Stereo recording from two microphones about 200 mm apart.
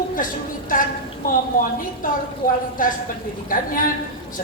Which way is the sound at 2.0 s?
45° left (ahead or behind).